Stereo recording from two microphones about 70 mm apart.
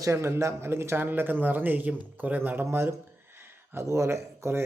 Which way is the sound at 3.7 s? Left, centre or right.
Right.